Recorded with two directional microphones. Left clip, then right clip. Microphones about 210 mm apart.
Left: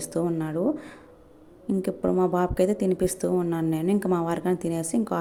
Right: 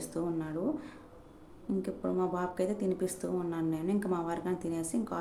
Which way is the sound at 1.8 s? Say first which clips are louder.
Left 10 dB; 30° left (ahead or behind).